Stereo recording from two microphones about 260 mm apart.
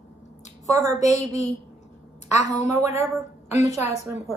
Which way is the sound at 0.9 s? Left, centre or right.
Left.